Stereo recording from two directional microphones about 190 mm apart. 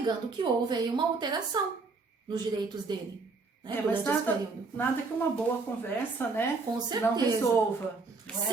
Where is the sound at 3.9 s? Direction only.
10° left (ahead or behind).